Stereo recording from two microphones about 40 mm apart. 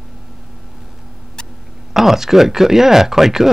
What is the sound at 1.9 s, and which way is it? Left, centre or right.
Speech, centre.